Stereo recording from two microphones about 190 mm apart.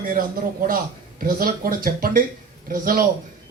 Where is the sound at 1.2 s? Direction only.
50° right (ahead or behind).